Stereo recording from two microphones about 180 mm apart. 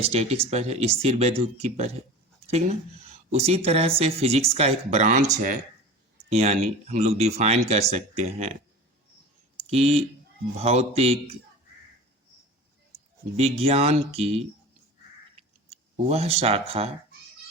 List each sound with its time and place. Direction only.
0.0 s speech: 35° right (ahead or behind)
6.3 s speech: 35° right (ahead or behind)
9.6 s speech: 35° right (ahead or behind)
13.3 s speech: 35° right (ahead or behind)
15.4 s a sound: 35° right (ahead or behind)